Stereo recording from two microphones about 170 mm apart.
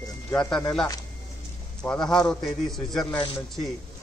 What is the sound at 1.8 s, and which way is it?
Speech, 15° left (ahead or behind).